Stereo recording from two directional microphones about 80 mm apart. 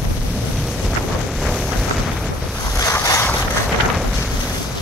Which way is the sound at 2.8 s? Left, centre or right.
Left.